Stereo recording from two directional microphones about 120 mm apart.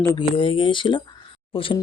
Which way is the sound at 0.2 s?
45° left (ahead or behind).